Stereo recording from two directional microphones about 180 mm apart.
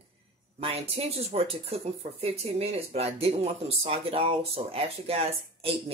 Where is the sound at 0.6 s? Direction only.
35° right (ahead or behind).